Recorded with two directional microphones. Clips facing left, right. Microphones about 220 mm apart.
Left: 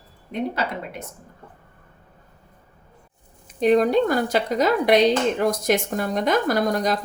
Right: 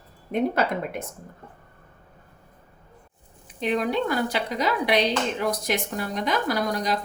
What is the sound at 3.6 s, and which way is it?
Speech, 45° left (ahead or behind).